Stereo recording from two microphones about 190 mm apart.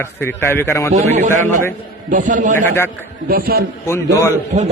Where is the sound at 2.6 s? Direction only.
10° left (ahead or behind).